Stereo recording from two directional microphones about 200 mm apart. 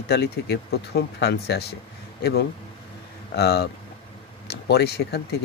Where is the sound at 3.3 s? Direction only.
55° left (ahead or behind).